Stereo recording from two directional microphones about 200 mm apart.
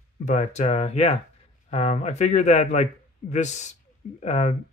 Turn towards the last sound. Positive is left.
turn(degrees=35)  # may be behind; listen again after turning